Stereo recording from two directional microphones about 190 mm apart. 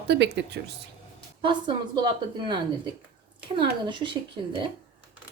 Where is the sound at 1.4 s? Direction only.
25° right (ahead or behind).